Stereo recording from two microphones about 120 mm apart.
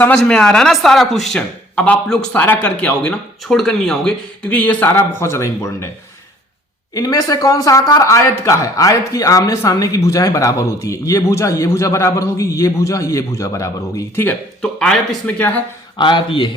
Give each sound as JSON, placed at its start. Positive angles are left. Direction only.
{"t": 0.0, "sound": "a man's voice", "side_deg": 10}
{"t": 6.9, "sound": "speech", "side_deg": 30}
{"t": 14.6, "sound": "a man's voice", "side_deg": 5}
{"t": 16.0, "sound": "a man's voice", "side_deg": 40}